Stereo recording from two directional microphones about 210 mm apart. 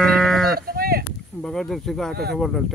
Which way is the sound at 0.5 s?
45° right (ahead or behind).